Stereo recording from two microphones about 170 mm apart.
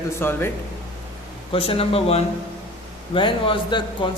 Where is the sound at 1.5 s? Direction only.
35° left (ahead or behind).